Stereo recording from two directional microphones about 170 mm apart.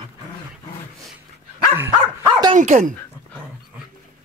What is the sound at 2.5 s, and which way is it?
Dog, 45° right (ahead or behind).